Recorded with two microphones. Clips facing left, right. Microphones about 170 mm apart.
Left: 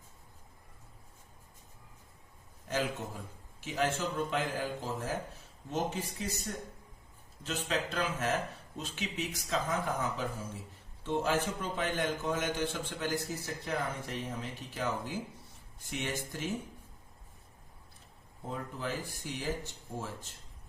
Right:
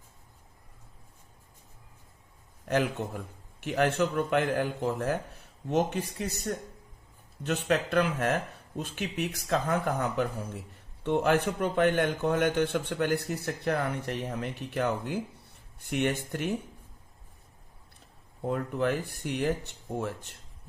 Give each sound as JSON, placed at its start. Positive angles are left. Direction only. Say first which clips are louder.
{"t": 2.6, "sound": "a man's voice", "louder": "right 6 dB", "side_deg": -60}
{"t": 18.4, "sound": "a man's voice", "louder": "right 10 dB", "side_deg": -65}